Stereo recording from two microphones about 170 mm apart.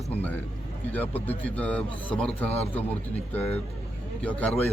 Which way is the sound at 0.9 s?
10° left (ahead or behind).